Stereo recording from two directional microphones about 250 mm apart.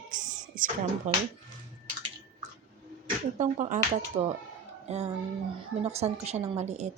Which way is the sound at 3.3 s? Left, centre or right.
Right.